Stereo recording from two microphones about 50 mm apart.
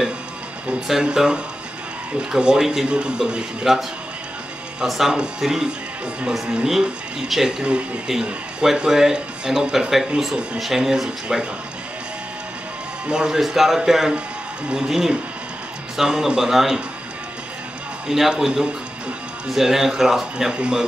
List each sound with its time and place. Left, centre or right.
1.1 s a man's voice: centre
4.8 s a man's voice: centre
13.1 s a man's voice: centre
18.0 s a man's voice: centre